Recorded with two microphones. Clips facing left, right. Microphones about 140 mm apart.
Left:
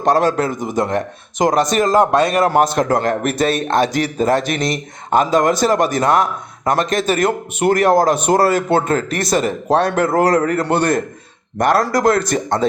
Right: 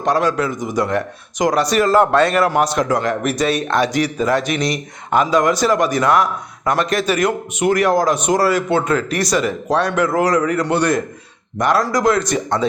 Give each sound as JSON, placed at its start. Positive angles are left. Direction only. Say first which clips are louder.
{"t": 0.0, "sound": "a man's voice", "louder": "left 2 dB", "side_deg": 35}
{"t": 0.8, "sound": "speech", "louder": "even", "side_deg": 25}
{"t": 2.5, "sound": "a man's voice", "louder": "left 2 dB", "side_deg": 45}
{"t": 4.2, "sound": "a man's voice", "louder": "left 3 dB", "side_deg": 30}
{"t": 4.4, "sound": "a man's voice", "louder": "even", "side_deg": 50}
{"t": 9.5, "sound": "speech", "louder": "left 2 dB", "side_deg": 30}
{"t": 10.2, "sound": "a man's voice", "louder": "left 3 dB", "side_deg": 55}